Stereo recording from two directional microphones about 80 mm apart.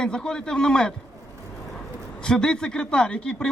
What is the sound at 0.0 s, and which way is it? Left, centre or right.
Speech, centre.